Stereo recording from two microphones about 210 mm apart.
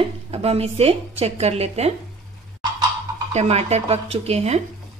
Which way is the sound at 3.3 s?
30° right (ahead or behind).